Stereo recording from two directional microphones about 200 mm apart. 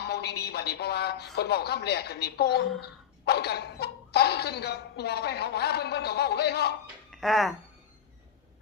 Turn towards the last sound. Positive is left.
turn(degrees=0)  # may be behind; listen again after turning